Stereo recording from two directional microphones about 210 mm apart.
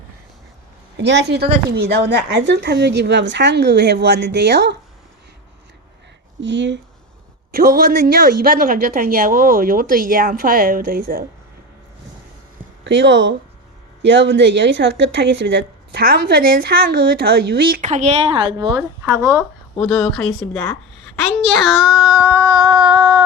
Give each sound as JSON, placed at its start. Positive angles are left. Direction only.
{"t": 0.9, "sound": "speech", "side_deg": -55}
{"t": 6.4, "sound": "speech", "side_deg": -60}
{"t": 7.5, "sound": "speech", "side_deg": -45}
{"t": 12.8, "sound": "speech", "side_deg": -60}
{"t": 19.8, "sound": "a child's voice", "side_deg": 5}
{"t": 22.4, "sound": "a sound", "side_deg": -20}